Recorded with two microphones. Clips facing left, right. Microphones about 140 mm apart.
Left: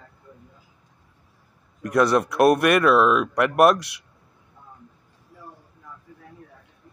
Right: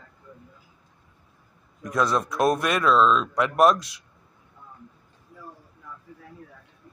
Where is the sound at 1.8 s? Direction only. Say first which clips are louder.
Left 5 dB; 70° left (ahead or behind).